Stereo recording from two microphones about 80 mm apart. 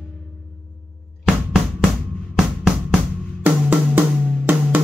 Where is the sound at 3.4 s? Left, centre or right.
Right.